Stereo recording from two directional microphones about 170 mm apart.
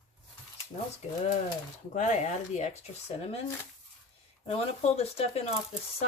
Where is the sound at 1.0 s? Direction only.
35° left (ahead or behind).